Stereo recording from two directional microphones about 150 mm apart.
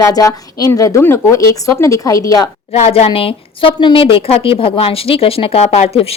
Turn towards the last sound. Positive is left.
turn(degrees=40)  # may be behind; listen again after turning